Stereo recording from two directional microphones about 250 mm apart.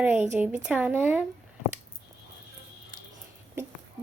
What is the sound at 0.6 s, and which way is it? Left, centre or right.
Speech, centre.